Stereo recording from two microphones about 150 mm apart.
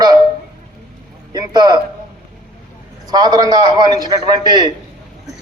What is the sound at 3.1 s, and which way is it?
A man's voice, 25° right (ahead or behind).